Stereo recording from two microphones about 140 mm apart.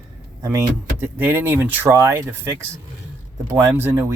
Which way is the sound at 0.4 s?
20° right (ahead or behind).